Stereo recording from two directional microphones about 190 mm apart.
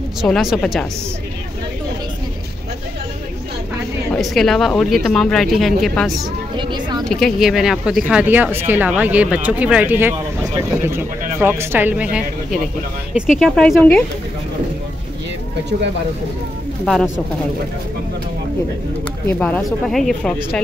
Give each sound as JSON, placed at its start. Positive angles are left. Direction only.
{"t": 0.2, "sound": "speech", "side_deg": 0}
{"t": 4.1, "sound": "speech", "side_deg": 0}
{"t": 6.5, "sound": "speech", "side_deg": -25}
{"t": 7.1, "sound": "speech", "side_deg": 0}
{"t": 16.8, "sound": "speech", "side_deg": 0}
{"t": 19.2, "sound": "speech", "side_deg": 5}